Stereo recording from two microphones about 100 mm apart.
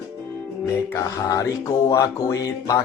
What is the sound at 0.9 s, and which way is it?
Speech, 35° left (ahead or behind).